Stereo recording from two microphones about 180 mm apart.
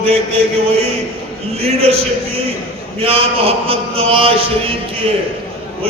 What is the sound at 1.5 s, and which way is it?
Speech, 35° right (ahead or behind).